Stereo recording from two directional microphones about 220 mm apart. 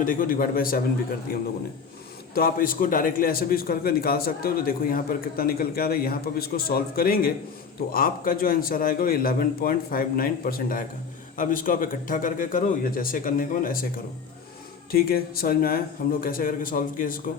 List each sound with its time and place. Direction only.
0.0 s a man's voice: 40° left (ahead or behind)
2.3 s a man's voice: 40° left (ahead or behind)
14.9 s a man's voice: 45° left (ahead or behind)